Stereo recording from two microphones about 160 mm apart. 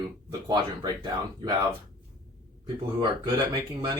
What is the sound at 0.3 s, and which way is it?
Speech, 25° right (ahead or behind).